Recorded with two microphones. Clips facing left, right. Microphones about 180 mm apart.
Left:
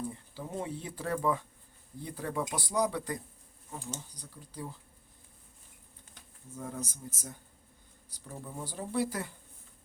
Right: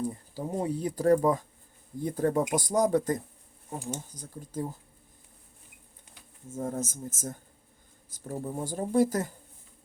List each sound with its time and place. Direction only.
0.0 s speech: 40° right (ahead or behind)
6.5 s speech: 45° right (ahead or behind)